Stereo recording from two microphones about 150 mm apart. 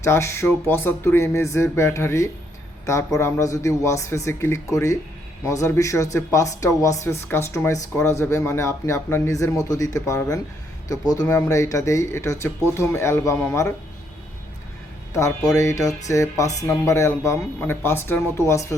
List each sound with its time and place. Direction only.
0.0 s speech: 15° left (ahead or behind)
15.4 s speech: 20° left (ahead or behind)